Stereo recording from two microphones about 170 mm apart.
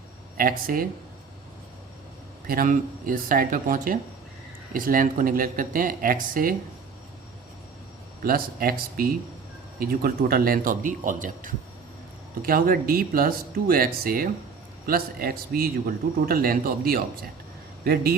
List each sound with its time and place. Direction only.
0.3 s a man's voice: 55° right (ahead or behind)
2.5 s a man's voice: 55° right (ahead or behind)
8.2 s a man's voice: 60° right (ahead or behind)